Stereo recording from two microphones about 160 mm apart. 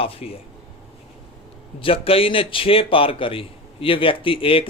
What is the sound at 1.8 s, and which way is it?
A man's voice, 35° left (ahead or behind).